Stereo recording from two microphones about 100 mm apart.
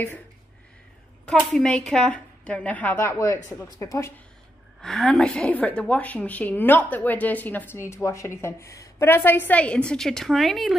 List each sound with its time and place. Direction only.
1.5 s a woman's voice: 10° left (ahead or behind)
3.1 s a woman's voice: 30° left (ahead or behind)
4.8 s a woman's voice: centre (ahead or behind)